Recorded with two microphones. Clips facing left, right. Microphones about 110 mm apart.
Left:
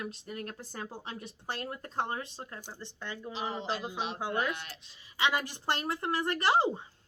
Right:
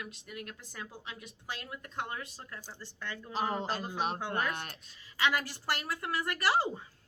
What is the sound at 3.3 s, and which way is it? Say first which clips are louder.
Speech: right 3 dB; 45° right (ahead or behind).